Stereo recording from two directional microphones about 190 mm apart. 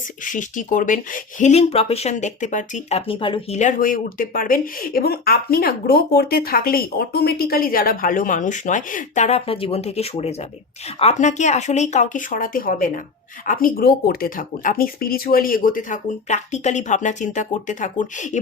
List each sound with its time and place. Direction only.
0.3 s speech: 45° left (ahead or behind); by 3.6 s 25° left (ahead or behind)
3.6 s speech: 45° left (ahead or behind)